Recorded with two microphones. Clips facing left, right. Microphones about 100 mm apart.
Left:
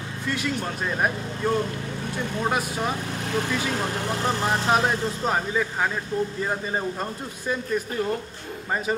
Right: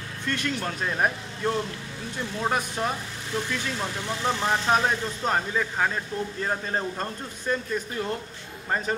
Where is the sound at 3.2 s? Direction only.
55° left (ahead or behind).